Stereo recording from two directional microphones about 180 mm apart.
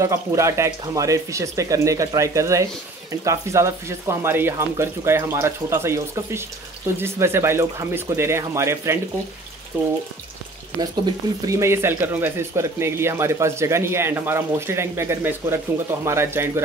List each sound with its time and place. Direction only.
0.0 s speech: 15° right (ahead or behind)